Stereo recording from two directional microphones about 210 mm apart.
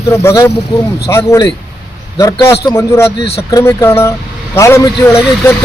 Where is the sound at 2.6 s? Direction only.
15° left (ahead or behind).